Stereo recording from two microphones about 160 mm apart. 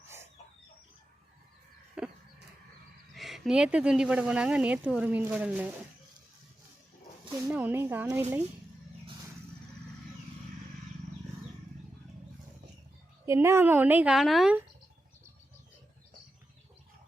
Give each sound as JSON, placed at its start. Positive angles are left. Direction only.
{"t": 2.0, "sound": "chicken", "side_deg": -5}
{"t": 3.2, "sound": "speech", "side_deg": 0}
{"t": 7.4, "sound": "speech", "side_deg": -10}
{"t": 13.2, "sound": "speech", "side_deg": -15}